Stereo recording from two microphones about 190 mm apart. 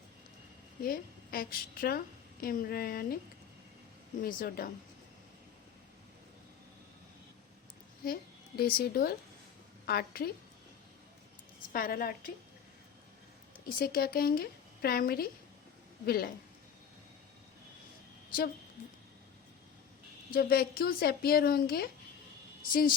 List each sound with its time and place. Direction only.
0.8 s a woman's voice: 50° left (ahead or behind)
4.2 s a woman's voice: 50° left (ahead or behind)
8.0 s a woman's voice: 50° left (ahead or behind)
11.7 s a woman's voice: 50° left (ahead or behind)
13.7 s a woman's voice: 55° left (ahead or behind)
20.3 s a woman's voice: 55° left (ahead or behind)